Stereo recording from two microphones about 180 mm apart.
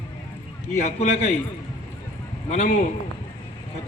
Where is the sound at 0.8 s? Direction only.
35° left (ahead or behind).